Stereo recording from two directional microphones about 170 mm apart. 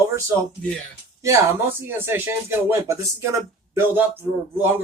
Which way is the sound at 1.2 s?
15° right (ahead or behind).